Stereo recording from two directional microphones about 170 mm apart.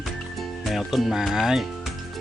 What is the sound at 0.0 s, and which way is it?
Music, centre (ahead or behind).